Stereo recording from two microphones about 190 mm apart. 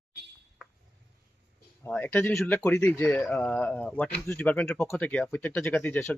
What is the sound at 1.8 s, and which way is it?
Speech, 10° left (ahead or behind).